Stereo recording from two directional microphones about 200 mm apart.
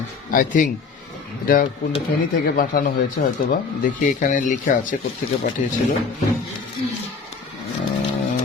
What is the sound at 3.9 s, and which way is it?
Speech, 40° left (ahead or behind).